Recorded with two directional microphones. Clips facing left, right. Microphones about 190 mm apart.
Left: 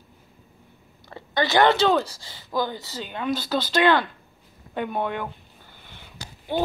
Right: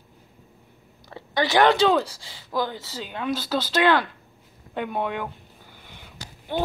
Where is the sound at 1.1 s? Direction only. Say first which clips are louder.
Even; 10° right (ahead or behind).